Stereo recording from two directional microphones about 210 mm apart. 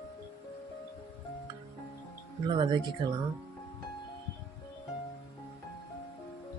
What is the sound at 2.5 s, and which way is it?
Speech, 20° right (ahead or behind).